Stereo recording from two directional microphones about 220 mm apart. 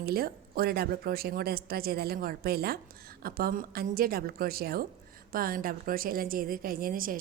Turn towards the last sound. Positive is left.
turn(degrees=-40)  # may be behind; listen again after turning